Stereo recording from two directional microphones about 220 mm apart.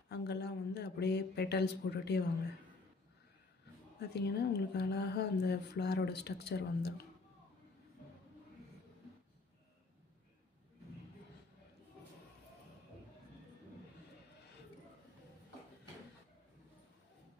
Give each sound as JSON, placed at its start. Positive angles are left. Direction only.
{"t": 0.1, "sound": "speech", "side_deg": 50}
{"t": 4.0, "sound": "speech", "side_deg": 50}